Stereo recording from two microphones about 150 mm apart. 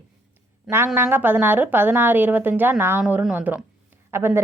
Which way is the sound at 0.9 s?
15° right (ahead or behind).